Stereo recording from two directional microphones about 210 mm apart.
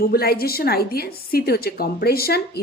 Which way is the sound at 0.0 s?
45° left (ahead or behind).